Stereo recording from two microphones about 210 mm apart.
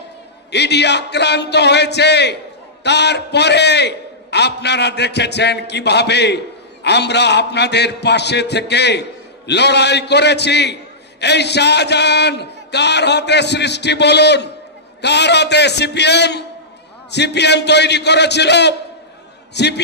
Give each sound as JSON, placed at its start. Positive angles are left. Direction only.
{"t": 0.5, "sound": "a man's voice", "side_deg": 55}